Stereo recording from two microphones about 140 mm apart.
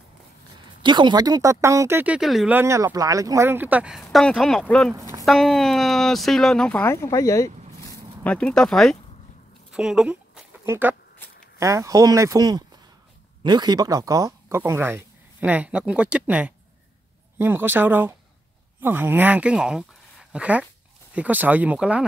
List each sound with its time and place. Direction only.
0.8 s speech: 35° right (ahead or behind); by 2.1 s 15° right (ahead or behind)
2.1 s speech: 5° right (ahead or behind)
2.5 s speech: 20° right (ahead or behind)
4.0 s speech: 5° left (ahead or behind); by 7.5 s 20° left (ahead or behind)
8.2 s speech: 10° left (ahead or behind)
9.7 s a sound: 5° right (ahead or behind)
10.6 s speech: 15° right (ahead or behind)